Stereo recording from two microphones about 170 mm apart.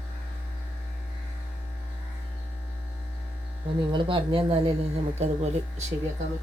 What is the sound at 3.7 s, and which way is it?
Speech, 30° right (ahead or behind).